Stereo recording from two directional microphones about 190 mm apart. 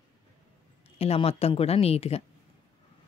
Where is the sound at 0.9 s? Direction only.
30° left (ahead or behind).